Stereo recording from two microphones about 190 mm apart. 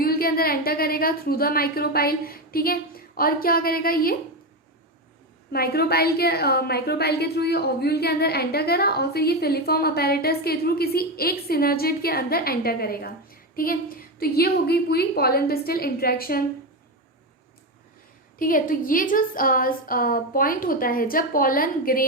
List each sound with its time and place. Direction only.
0.0 s a woman's voice: 50° left (ahead or behind)
5.5 s a woman's voice: 55° left (ahead or behind)
18.3 s a woman's voice: 45° left (ahead or behind)